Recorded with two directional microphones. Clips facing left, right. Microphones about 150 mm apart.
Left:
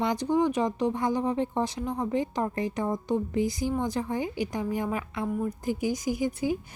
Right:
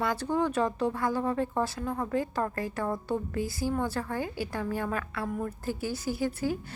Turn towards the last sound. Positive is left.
turn(degrees=15)  # may be behind; listen again after turning